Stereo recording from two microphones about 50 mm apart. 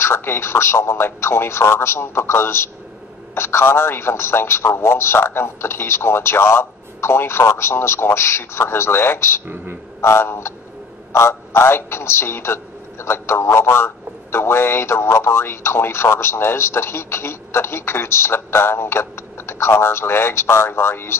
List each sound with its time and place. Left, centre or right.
0.0 s a man's voice: left